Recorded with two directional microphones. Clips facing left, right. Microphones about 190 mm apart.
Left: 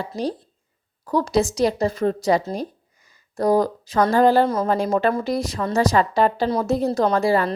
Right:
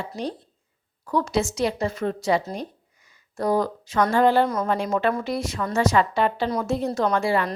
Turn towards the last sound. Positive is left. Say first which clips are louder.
# left 3 dB
turn(degrees=35)  # may be behind; listen again after turning